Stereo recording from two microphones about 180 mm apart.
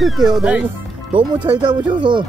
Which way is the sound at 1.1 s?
25° right (ahead or behind).